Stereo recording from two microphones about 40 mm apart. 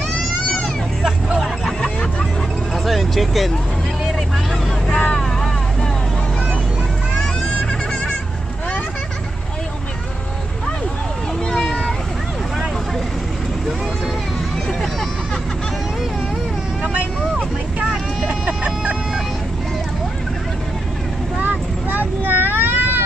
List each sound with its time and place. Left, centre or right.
1.4 s a sound: centre
2.7 s vehicle: centre
4.8 s vehicle: centre
11.5 s vehicle: centre
16.9 s vehicle: right
21.4 s vehicle: right